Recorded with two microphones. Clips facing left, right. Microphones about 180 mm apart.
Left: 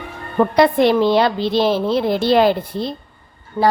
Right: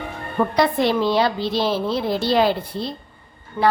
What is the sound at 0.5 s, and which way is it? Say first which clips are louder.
A woman's voice: left 6 dB; 55° left (ahead or behind).